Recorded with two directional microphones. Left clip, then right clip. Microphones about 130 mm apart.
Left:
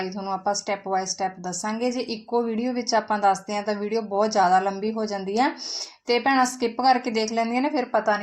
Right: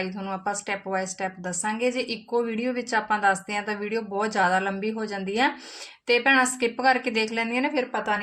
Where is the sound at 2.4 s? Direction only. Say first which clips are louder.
Left 1 dB; 35° left (ahead or behind).